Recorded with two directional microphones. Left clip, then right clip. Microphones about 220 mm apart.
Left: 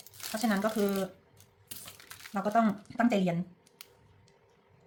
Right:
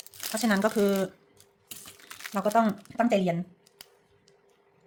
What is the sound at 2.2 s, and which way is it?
Speech, 45° right (ahead or behind).